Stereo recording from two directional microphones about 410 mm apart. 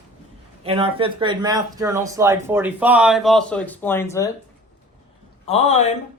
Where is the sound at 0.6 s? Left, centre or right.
Centre.